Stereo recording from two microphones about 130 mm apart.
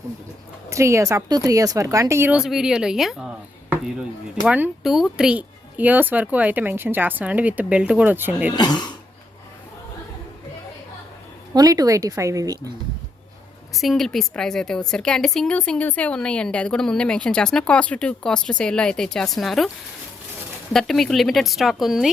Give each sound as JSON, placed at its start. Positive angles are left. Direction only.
{"t": 0.7, "sound": "speech", "side_deg": -25}
{"t": 2.3, "sound": "a woman's voice", "side_deg": -5}
{"t": 4.4, "sound": "speech", "side_deg": -15}
{"t": 4.8, "sound": "speech", "side_deg": 0}
{"t": 8.5, "sound": "speech", "side_deg": 35}
{"t": 11.5, "sound": "speech", "side_deg": -30}
{"t": 13.7, "sound": "a woman's voice", "side_deg": 0}
{"t": 20.7, "sound": "a woman's voice", "side_deg": 0}